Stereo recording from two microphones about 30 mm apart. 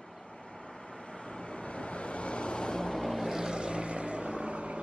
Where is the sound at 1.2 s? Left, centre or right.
Left.